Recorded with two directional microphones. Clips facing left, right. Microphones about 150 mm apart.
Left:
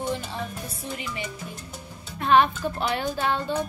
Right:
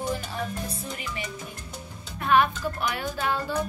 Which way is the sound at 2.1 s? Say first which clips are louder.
Left 2 dB; 30° left (ahead or behind).